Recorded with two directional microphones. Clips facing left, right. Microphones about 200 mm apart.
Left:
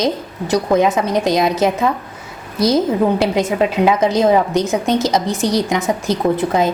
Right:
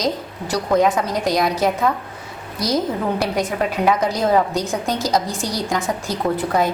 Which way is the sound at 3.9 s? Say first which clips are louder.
Left 3 dB; 20° left (ahead or behind).